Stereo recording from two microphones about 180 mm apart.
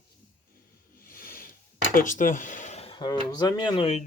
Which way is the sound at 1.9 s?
45° left (ahead or behind).